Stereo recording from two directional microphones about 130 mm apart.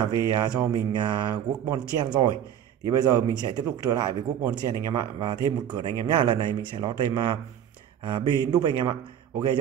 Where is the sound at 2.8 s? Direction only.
30° right (ahead or behind).